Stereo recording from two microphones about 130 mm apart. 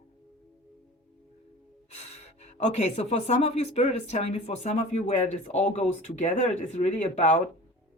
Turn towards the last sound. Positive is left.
turn(degrees=60)  # may be behind; listen again after turning